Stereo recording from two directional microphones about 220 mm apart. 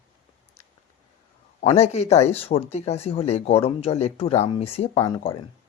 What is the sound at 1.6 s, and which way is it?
Speech, 30° left (ahead or behind).